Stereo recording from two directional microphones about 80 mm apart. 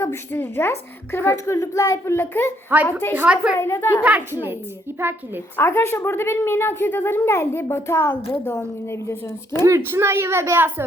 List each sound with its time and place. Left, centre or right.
0.0 s a woman's voice: left
2.1 s a woman's voice: left
2.7 s speech: right
3.2 s a woman's voice: centre
3.6 s a woman's voice: left
5.5 s a woman's voice: left
9.6 s a woman's voice: right